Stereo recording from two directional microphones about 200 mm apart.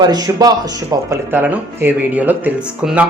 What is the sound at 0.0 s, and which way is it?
A man's voice, 20° right (ahead or behind).